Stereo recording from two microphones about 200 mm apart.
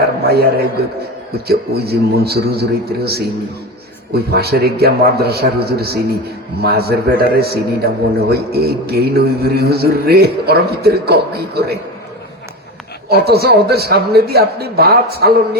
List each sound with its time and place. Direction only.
0.2 s a man's voice: 50° right (ahead or behind)
1.5 s a man's voice: 55° right (ahead or behind)
13.1 s a man's voice: 50° right (ahead or behind)